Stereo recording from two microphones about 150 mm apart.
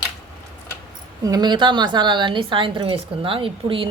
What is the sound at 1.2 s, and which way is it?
A woman's voice, 25° right (ahead or behind).